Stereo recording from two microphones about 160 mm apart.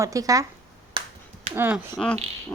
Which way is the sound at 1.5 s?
15° right (ahead or behind).